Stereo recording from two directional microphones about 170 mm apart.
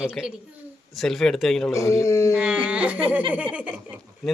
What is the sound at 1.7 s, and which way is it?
Speech, 15° left (ahead or behind).